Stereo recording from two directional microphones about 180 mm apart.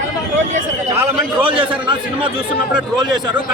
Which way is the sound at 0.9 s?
10° right (ahead or behind).